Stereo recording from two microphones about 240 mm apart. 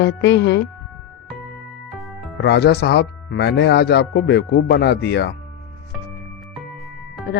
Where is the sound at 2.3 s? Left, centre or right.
Left.